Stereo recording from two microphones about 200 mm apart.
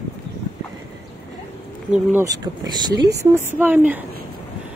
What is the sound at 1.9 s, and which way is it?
Speech, 10° right (ahead or behind).